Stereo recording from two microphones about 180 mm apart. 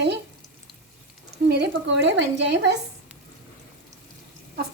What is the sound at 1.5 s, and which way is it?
A woman's voice, 75° right (ahead or behind).